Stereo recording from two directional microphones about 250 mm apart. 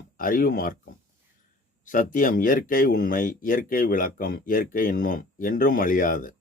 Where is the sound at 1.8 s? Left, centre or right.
Left.